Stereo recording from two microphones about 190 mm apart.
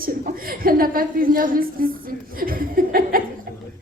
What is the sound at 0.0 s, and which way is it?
A woman's voice, 50° right (ahead or behind).